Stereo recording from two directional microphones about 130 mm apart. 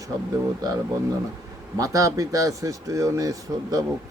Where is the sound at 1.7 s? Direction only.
25° right (ahead or behind).